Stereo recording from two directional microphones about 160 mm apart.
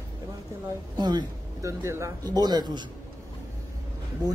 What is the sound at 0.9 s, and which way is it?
Speech, 25° right (ahead or behind).